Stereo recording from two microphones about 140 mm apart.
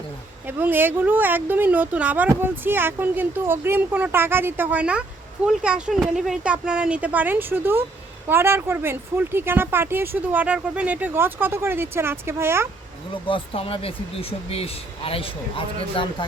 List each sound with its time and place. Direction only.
0.4 s speech: 15° right (ahead or behind)
13.2 s speech: 40° left (ahead or behind)